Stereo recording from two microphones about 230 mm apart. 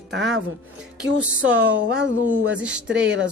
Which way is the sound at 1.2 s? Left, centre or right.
Centre.